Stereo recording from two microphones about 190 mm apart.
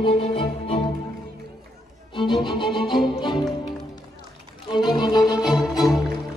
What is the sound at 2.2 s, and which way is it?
Music, 25° left (ahead or behind).